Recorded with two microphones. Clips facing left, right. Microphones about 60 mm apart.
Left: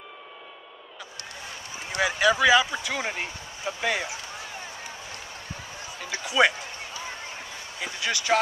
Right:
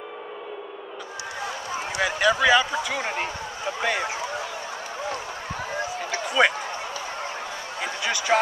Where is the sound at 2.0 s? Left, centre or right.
Centre.